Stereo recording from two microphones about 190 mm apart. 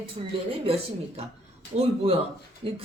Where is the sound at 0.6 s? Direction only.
30° right (ahead or behind).